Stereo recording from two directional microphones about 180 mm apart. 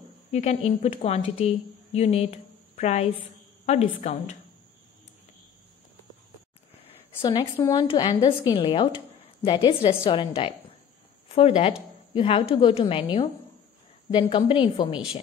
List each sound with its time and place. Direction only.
0.3 s a woman's voice: 35° left (ahead or behind)
6.8 s a woman's voice: 25° left (ahead or behind)